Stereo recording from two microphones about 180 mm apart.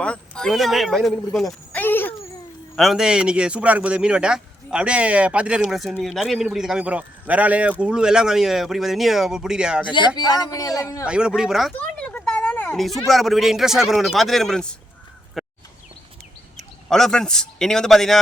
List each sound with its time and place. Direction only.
0.0 s a man's voice: 5° left (ahead or behind)
2.7 s a man's voice: centre (ahead or behind)
10.2 s speech: 20° left (ahead or behind)
11.0 s speech: 5° right (ahead or behind)
15.4 s a sound: centre (ahead or behind)
16.9 s a man's voice: 5° left (ahead or behind)